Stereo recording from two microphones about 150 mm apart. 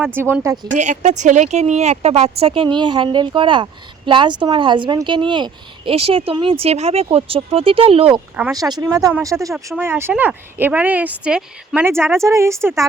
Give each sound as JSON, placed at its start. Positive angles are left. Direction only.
{"t": 0.1, "sound": "speech", "side_deg": -15}
{"t": 0.7, "sound": "a woman's voice", "side_deg": -55}
{"t": 8.5, "sound": "speech", "side_deg": -25}